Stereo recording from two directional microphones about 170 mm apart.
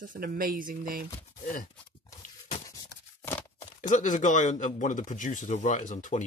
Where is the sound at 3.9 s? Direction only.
50° left (ahead or behind).